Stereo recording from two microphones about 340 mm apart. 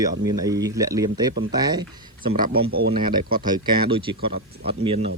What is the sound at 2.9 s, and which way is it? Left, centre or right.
Speech, centre.